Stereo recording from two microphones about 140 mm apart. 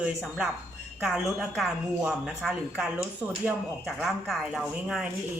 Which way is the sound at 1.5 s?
Centre (ahead or behind).